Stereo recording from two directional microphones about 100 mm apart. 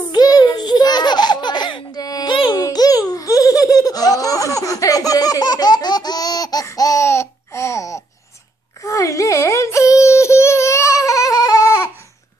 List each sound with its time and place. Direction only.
0.1 s baby laughter: 45° left (ahead or behind)
2.5 s laughter: 40° left (ahead or behind)
8.8 s a sound: 35° left (ahead or behind)